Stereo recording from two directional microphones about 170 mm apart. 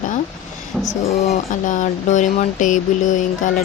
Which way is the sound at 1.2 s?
50° left (ahead or behind).